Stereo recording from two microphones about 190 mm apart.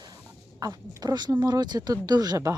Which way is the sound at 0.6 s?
20° right (ahead or behind).